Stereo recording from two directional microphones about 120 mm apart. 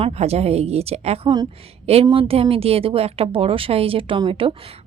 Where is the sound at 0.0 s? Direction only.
60° right (ahead or behind).